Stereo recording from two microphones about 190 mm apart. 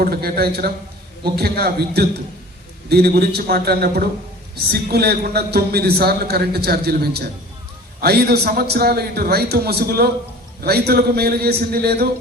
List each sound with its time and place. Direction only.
0.0 s a man's voice: 55° right (ahead or behind)